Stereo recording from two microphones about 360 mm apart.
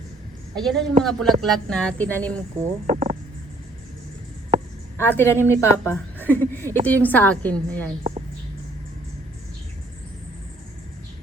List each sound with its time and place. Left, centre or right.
0.5 s a woman's voice: centre
2.8 s frog: centre
4.9 s a woman's voice: centre